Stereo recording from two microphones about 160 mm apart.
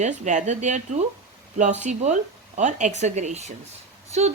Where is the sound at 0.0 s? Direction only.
50° right (ahead or behind).